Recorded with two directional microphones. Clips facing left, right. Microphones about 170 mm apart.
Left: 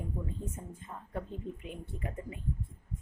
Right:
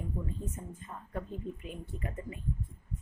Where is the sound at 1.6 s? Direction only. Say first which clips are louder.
Even; 15° left (ahead or behind).